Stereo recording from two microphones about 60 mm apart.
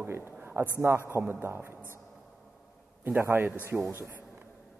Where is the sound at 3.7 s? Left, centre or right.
Centre.